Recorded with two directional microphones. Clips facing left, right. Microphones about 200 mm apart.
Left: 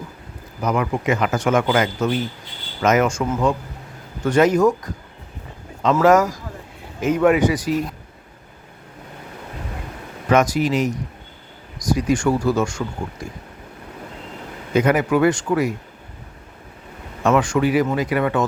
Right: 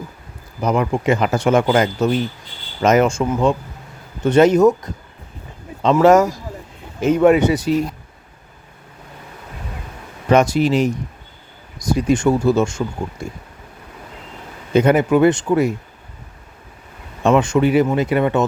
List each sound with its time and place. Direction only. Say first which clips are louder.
0.6 s speech: right 3 dB; 30° right (ahead or behind)
5.9 s speech: right 3 dB; 25° right (ahead or behind)
10.2 s speech: right 3 dB; 25° right (ahead or behind)
14.7 s speech: right 3 dB; 25° right (ahead or behind)
17.2 s speech: right 3 dB; 25° right (ahead or behind)